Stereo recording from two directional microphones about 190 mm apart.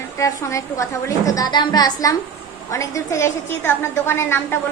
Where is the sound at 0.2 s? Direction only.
15° left (ahead or behind).